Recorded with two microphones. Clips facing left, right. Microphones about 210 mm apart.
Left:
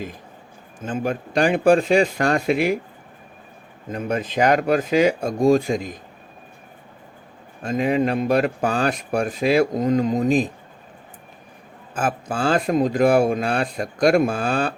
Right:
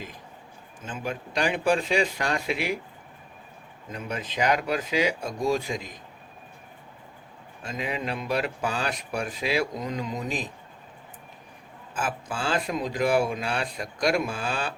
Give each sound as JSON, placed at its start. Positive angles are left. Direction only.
{"t": 0.9, "sound": "speech", "side_deg": 50}
{"t": 3.9, "sound": "speech", "side_deg": 50}
{"t": 7.6, "sound": "speech", "side_deg": 50}
{"t": 11.9, "sound": "speech", "side_deg": 50}